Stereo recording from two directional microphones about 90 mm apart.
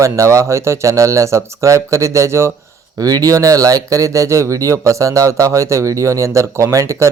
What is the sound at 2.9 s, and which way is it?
Speech, 45° right (ahead or behind).